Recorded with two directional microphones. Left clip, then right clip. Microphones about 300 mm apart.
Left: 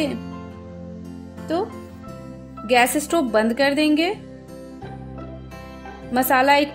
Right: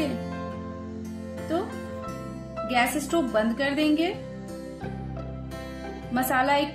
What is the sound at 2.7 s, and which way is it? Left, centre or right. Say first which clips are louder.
A woman's voice: left 7 dB; left.